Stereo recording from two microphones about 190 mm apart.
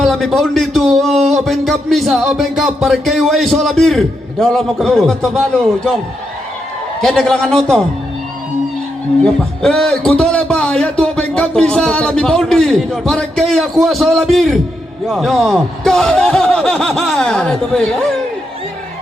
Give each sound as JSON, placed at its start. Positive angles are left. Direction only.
{"t": 0.0, "sound": "a man's voice", "side_deg": 0}
{"t": 7.0, "sound": "a man's voice", "side_deg": 0}
{"t": 9.2, "sound": "a man's voice", "side_deg": 0}